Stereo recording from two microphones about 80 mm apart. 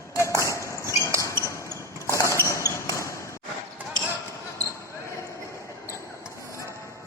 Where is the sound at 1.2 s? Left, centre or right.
Left.